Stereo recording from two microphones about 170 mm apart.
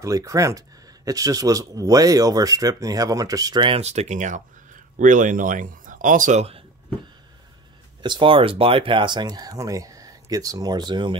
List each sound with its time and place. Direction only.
0.0 s speech: 20° right (ahead or behind); by 6.6 s 40° right (ahead or behind)
8.0 s speech: 30° right (ahead or behind)